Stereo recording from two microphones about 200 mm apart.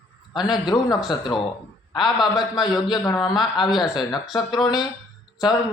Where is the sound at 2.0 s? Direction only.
Centre (ahead or behind).